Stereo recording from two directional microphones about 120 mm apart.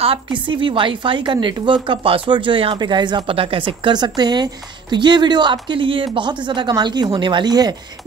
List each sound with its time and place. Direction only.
0.0 s a woman's voice: 45° right (ahead or behind)